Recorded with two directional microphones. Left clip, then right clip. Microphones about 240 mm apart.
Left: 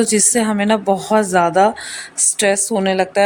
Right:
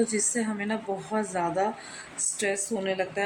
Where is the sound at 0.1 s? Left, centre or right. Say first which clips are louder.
Left 13 dB; left.